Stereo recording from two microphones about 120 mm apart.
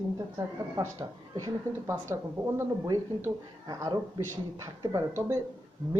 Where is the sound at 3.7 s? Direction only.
35° right (ahead or behind).